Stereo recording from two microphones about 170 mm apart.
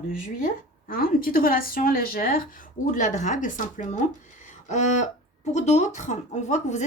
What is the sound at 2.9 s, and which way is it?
A woman's voice, 45° left (ahead or behind).